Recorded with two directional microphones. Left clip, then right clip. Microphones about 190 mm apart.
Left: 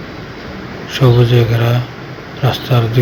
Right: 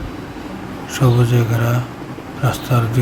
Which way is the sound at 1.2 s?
10° right (ahead or behind).